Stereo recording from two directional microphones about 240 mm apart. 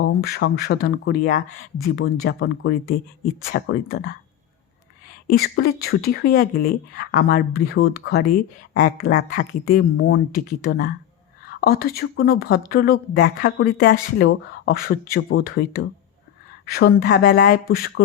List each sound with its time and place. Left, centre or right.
0.2 s speech: left
5.3 s speech: left